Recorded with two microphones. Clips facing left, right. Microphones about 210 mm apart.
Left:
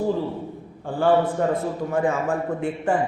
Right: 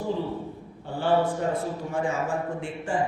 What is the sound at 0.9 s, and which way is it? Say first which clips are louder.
A man's voice: left 4 dB; 50° left (ahead or behind).